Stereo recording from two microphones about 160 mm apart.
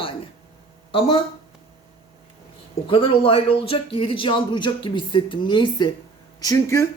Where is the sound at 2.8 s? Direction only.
35° left (ahead or behind).